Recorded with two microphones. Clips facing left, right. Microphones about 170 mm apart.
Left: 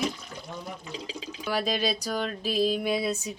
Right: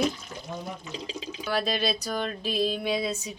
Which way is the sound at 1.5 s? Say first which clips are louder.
Even; 10° left (ahead or behind).